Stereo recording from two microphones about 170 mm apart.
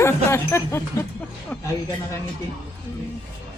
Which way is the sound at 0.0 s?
15° left (ahead or behind).